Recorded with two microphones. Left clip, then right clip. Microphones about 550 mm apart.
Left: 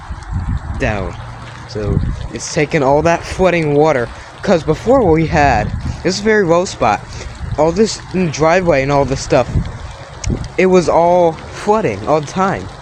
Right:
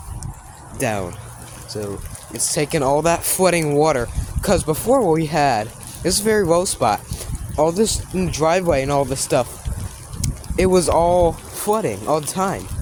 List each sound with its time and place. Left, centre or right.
0.8 s speech: right